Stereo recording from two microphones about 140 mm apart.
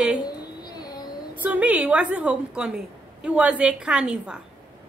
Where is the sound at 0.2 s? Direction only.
30° left (ahead or behind).